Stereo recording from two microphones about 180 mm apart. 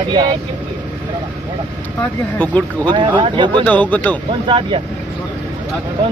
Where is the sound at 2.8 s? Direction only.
25° right (ahead or behind).